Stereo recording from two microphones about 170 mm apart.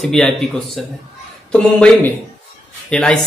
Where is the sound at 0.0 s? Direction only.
5° left (ahead or behind).